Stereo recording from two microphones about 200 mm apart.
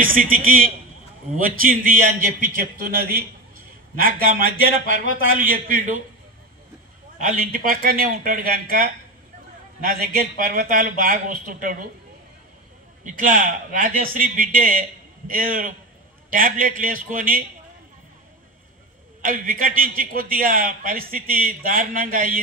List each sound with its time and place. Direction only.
0.0 s a man's voice: 45° right (ahead or behind)
7.2 s a man's voice: 40° right (ahead or behind)
13.0 s a man's voice: 40° right (ahead or behind)
19.2 s a man's voice: 45° right (ahead or behind)